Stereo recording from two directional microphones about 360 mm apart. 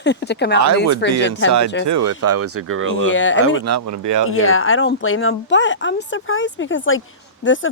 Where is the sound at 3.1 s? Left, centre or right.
Left.